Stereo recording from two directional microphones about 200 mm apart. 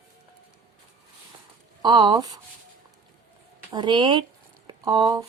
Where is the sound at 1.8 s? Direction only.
20° right (ahead or behind).